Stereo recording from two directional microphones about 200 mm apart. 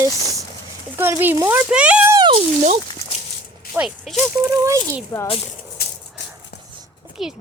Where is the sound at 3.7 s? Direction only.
Centre (ahead or behind).